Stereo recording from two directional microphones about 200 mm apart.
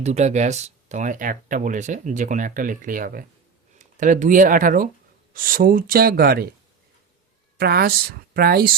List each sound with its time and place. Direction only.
0.0 s speech: 35° right (ahead or behind); by 6.5 s 50° right (ahead or behind)
7.6 s speech: 50° right (ahead or behind)